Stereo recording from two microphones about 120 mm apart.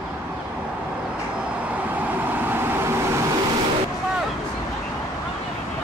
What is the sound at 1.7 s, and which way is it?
Vehicle, 15° right (ahead or behind).